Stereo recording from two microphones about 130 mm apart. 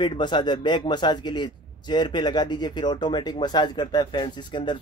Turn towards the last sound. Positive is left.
turn(degrees=35)  # may be behind; listen again after turning